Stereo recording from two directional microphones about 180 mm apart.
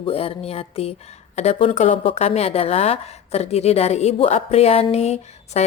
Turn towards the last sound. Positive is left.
turn(degrees=35)  # may be behind; listen again after turning